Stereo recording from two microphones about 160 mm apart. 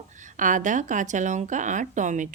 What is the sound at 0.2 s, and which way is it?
Speech, 55° right (ahead or behind).